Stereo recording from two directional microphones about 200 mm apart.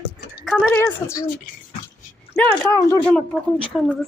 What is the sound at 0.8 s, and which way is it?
Speech, 15° left (ahead or behind).